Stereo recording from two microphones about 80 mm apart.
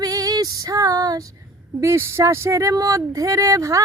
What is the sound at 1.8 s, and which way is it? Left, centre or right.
Speech, right.